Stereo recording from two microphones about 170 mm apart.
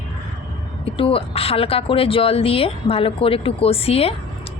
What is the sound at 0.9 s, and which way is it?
Speech, 30° left (ahead or behind).